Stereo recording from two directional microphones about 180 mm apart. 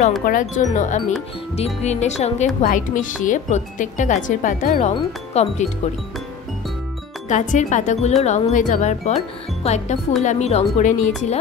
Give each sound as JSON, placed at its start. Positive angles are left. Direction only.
{"t": 0.2, "sound": "speech", "side_deg": 50}
{"t": 7.2, "sound": "speech", "side_deg": 40}